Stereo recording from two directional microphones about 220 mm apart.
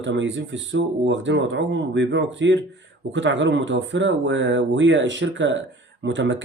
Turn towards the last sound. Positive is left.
turn(degrees=-55)  # may be behind; listen again after turning